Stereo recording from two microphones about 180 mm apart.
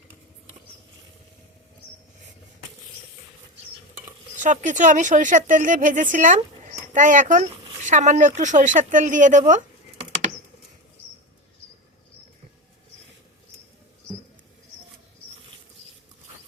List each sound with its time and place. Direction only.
4.4 s a woman's voice: 45° right (ahead or behind)